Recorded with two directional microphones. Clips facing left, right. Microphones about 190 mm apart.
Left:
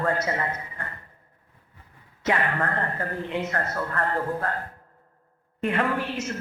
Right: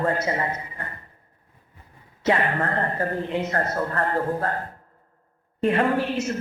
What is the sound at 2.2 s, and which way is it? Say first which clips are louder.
A man's voice: right 3 dB; 25° right (ahead or behind).